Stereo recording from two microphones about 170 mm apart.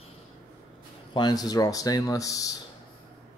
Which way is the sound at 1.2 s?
25° left (ahead or behind).